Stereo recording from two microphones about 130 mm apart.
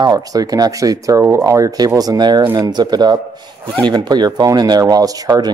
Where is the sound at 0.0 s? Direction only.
30° right (ahead or behind).